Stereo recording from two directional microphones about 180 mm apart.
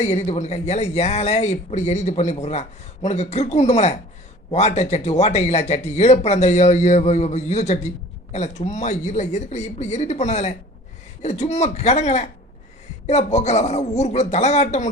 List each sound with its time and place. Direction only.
0.0 s speech: 40° left (ahead or behind)